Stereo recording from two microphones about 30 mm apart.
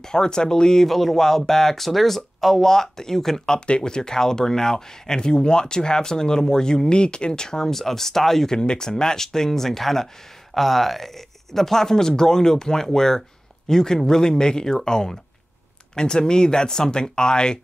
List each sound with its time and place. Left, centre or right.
0.0 s speech: left
0.8 s speech: centre
8.5 s speech: left